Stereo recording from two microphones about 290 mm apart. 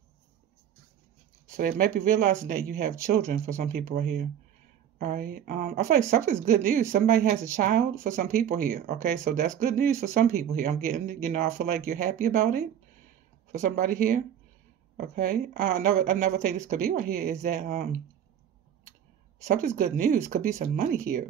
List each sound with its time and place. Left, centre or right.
1.6 s speech: right
19.4 s speech: right